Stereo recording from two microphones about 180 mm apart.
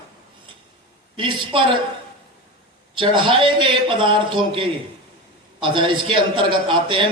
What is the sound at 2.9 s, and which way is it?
A man's voice, 30° right (ahead or behind).